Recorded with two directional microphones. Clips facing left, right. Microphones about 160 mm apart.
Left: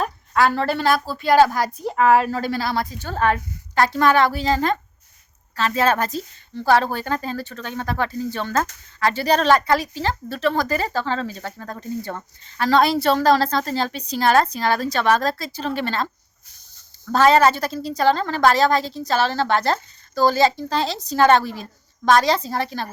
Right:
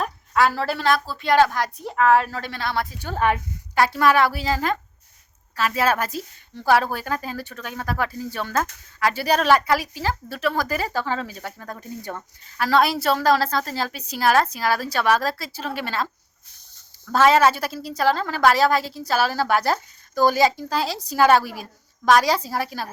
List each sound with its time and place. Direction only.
0.0 s a woman's voice: centre (ahead or behind)
3.0 s a woman's voice: 15° right (ahead or behind)
17.1 s a woman's voice: 5° right (ahead or behind)